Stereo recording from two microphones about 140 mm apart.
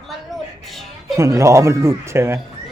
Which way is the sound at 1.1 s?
20° right (ahead or behind).